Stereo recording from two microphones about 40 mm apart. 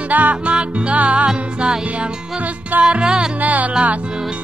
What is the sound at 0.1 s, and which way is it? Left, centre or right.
Music, right.